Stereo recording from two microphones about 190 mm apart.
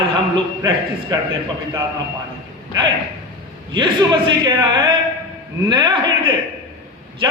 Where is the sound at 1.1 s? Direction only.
20° right (ahead or behind).